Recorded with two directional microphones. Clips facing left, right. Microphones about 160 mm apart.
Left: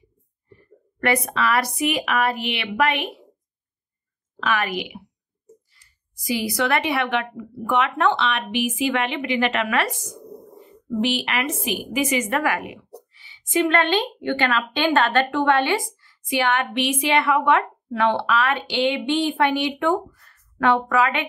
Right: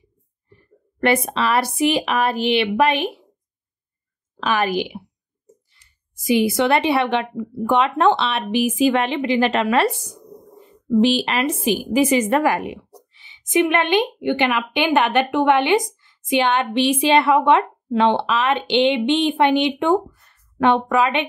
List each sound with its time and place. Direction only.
0.5 s a woman's voice: 30° right (ahead or behind)
4.4 s a woman's voice: 30° right (ahead or behind)